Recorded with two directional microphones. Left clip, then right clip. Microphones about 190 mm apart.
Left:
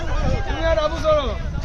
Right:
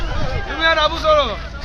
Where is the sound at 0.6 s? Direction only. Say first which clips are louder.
Right 5 dB; 20° right (ahead or behind).